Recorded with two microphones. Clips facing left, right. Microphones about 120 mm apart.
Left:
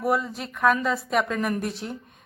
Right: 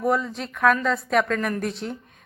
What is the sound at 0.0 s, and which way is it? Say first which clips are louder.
A woman's voice: right 1 dB; 5° left (ahead or behind).